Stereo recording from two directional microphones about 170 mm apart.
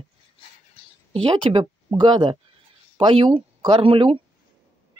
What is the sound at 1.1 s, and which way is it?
Speech, 30° right (ahead or behind).